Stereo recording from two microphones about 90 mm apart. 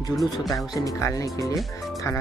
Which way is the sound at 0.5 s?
40° left (ahead or behind).